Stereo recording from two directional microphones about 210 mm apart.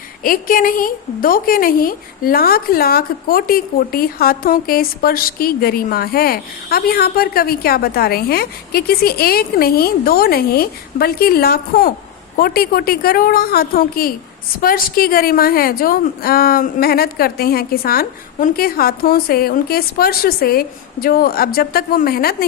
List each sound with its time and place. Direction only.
0.2 s a woman's voice: 40° left (ahead or behind)